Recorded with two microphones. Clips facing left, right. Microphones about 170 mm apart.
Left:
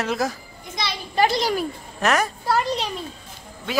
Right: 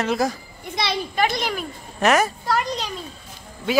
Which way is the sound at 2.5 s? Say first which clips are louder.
Left 5 dB; 30° left (ahead or behind).